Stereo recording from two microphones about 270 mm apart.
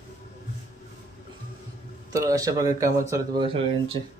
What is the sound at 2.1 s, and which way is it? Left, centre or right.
A man's voice, centre.